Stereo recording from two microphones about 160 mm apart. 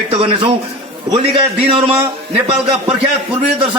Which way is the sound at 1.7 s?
35° right (ahead or behind).